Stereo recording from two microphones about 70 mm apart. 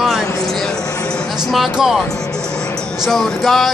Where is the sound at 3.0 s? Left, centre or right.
Centre.